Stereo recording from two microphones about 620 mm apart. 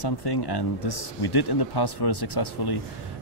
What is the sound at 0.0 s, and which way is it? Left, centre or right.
Speech, left.